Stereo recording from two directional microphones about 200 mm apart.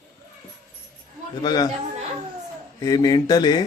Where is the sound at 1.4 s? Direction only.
20° left (ahead or behind).